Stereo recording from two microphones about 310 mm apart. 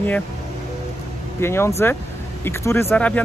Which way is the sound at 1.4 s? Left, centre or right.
Centre.